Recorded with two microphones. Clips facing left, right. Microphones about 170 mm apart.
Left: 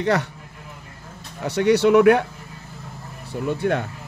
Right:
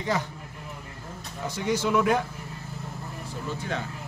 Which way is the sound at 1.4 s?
70° left (ahead or behind).